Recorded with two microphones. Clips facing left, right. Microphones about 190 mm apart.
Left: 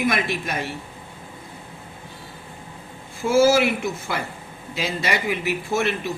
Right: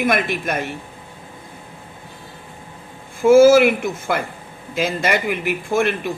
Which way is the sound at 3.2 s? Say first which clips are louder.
Right 7 dB; 55° right (ahead or behind).